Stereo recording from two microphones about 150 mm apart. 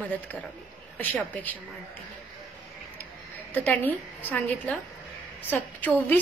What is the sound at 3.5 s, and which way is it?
A woman's voice, 10° left (ahead or behind).